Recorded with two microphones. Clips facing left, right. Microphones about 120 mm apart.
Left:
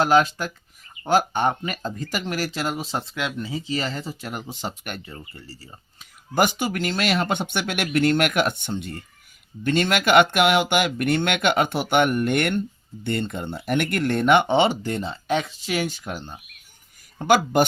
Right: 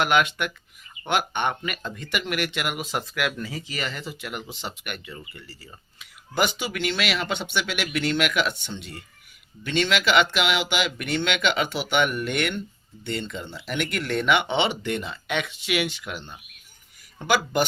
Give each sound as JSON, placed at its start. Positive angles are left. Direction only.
{"t": 0.0, "sound": "speech", "side_deg": 35}